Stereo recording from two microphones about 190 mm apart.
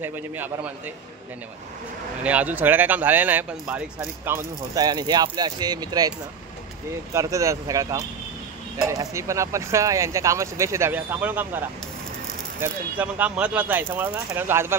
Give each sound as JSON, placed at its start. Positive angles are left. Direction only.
{"t": 2.2, "sound": "speech", "side_deg": -10}
{"t": 7.2, "sound": "speech", "side_deg": -15}
{"t": 12.6, "sound": "speech", "side_deg": -10}